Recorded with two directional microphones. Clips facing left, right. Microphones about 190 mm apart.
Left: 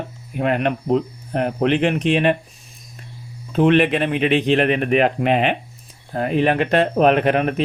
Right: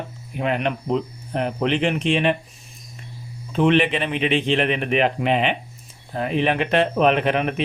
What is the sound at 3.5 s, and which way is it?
Speech, 45° left (ahead or behind).